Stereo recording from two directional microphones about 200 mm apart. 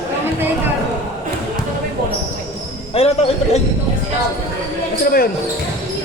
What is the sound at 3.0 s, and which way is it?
Basketball bounce, 30° left (ahead or behind).